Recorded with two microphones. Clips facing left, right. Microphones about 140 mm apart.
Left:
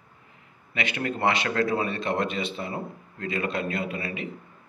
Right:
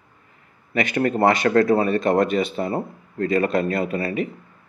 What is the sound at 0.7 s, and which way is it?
A man's voice, 45° right (ahead or behind).